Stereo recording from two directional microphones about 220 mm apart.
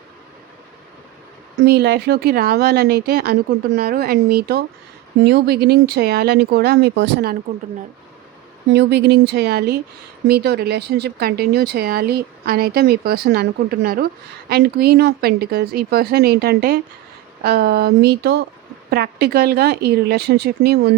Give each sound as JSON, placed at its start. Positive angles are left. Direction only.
{"t": 1.6, "sound": "speech", "side_deg": -50}
{"t": 8.7, "sound": "speech", "side_deg": -50}